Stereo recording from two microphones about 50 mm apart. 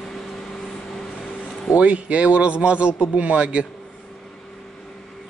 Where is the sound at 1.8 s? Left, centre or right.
Right.